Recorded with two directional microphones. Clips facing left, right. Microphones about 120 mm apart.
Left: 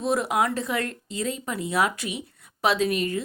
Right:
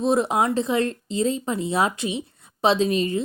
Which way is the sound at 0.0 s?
25° right (ahead or behind).